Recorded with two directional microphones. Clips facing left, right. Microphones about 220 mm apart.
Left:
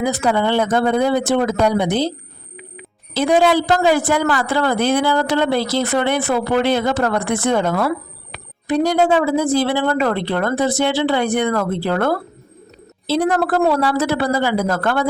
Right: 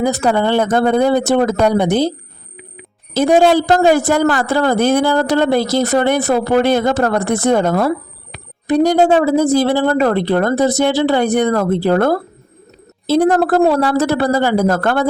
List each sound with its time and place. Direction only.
0.0 s a woman's voice: 45° right (ahead or behind)
3.2 s a woman's voice: 45° right (ahead or behind)